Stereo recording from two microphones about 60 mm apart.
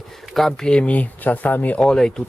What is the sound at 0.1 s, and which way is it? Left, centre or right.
Speech, centre.